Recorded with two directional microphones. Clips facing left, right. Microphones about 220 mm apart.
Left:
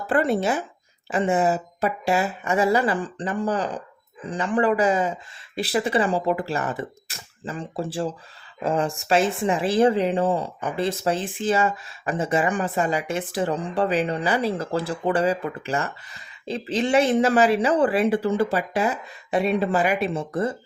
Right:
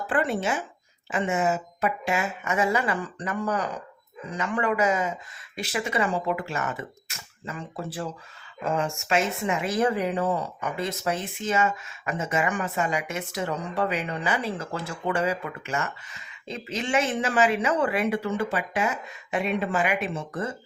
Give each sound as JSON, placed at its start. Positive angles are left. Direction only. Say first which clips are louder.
{"t": 0.1, "sound": "speech", "louder": "left 5 dB", "side_deg": 40}